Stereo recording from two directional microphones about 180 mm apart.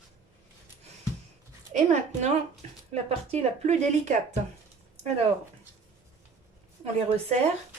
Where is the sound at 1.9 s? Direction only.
40° right (ahead or behind).